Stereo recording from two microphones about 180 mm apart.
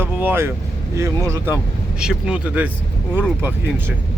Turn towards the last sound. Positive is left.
turn(degrees=-10)  # may be behind; listen again after turning